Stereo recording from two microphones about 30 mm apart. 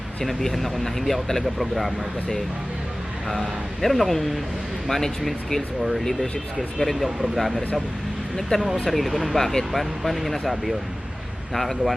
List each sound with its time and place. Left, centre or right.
0.3 s speech: centre
3.2 s speech: centre
8.4 s speech: centre
8.9 s speech: centre